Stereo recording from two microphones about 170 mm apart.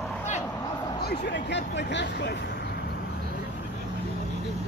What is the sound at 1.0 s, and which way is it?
Speech, 70° left (ahead or behind).